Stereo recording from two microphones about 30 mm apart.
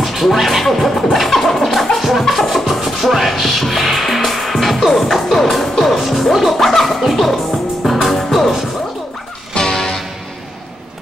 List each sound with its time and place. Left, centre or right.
0.0 s speech: centre
1.1 s scratching: centre
2.0 s music: centre
9.7 s music: left